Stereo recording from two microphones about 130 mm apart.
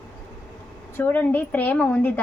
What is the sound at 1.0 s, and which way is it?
A woman's voice, 15° left (ahead or behind).